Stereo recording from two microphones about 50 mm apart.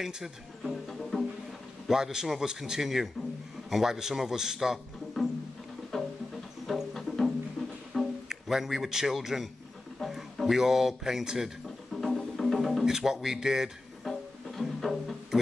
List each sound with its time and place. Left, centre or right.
0.0 s speech: centre
0.8 s speech: centre
1.9 s a man's voice: centre
5.9 s music: centre
7.9 s speech: centre
10.0 s a sound: centre
12.8 s a man's voice: centre
14.0 s music: centre